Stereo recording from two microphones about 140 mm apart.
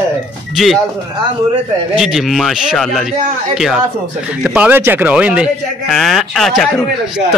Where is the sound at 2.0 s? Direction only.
5° right (ahead or behind).